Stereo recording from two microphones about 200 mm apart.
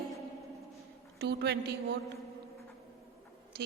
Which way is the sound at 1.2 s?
55° right (ahead or behind).